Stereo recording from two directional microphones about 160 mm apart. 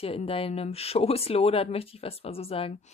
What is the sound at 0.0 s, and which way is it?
Speech, 35° left (ahead or behind).